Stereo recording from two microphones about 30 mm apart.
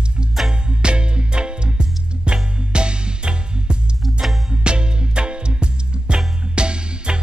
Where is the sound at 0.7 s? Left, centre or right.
Right.